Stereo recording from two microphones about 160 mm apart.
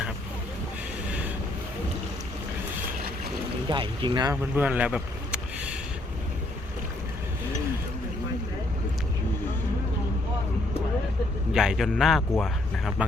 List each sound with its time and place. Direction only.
3.7 s speech: 30° right (ahead or behind)
4.5 s speech: 10° right (ahead or behind)
11.5 s a man's voice: 5° right (ahead or behind)